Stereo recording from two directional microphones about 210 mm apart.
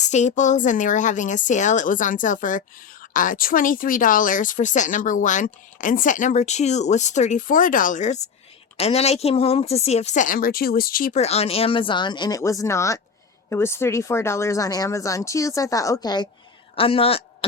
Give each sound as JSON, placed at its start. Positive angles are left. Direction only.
{"t": 0.1, "sound": "speech", "side_deg": 35}